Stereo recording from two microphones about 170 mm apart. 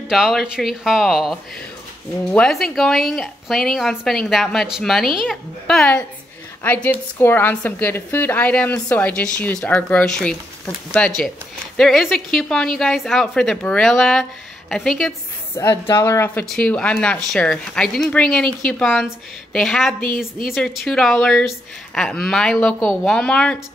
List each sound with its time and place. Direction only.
0.1 s a woman's voice: centre (ahead or behind)
15.5 s a woman's voice: 20° left (ahead or behind)